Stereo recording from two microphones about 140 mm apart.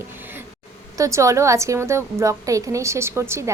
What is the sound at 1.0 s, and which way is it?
A woman's voice, 20° right (ahead or behind).